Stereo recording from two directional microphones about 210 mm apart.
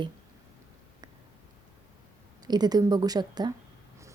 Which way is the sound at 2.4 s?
20° right (ahead or behind).